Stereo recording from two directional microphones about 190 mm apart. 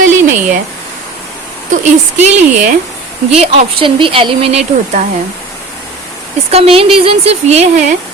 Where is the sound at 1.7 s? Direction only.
40° right (ahead or behind).